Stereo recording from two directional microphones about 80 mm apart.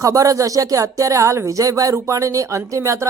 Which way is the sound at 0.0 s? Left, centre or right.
Right.